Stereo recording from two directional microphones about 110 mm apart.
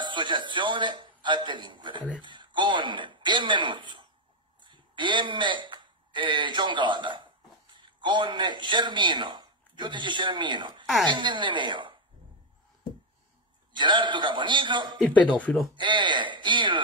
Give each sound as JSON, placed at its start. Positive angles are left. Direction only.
{"t": 0.0, "sound": "a man's voice", "side_deg": -45}
{"t": 13.7, "sound": "a man's voice", "side_deg": -45}